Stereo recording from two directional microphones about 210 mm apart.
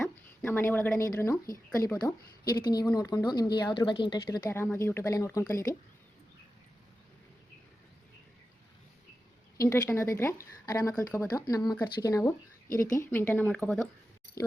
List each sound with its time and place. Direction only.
0.0 s a woman's voice: 10° left (ahead or behind)
9.6 s a woman's voice: 15° left (ahead or behind)